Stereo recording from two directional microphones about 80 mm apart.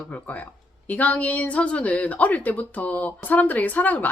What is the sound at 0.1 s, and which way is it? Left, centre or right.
Speech, centre.